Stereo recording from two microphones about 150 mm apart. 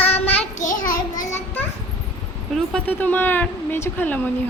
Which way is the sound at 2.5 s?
10° left (ahead or behind).